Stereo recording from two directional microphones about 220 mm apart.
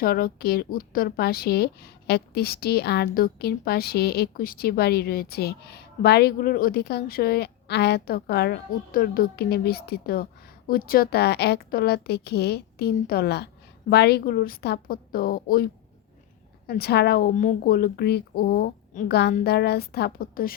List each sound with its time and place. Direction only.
0.0 s a woman's voice: 40° left (ahead or behind)